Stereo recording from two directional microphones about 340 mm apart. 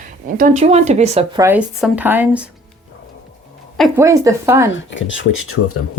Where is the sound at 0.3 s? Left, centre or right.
Right.